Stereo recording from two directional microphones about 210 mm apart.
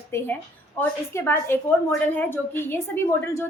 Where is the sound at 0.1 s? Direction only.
10° left (ahead or behind).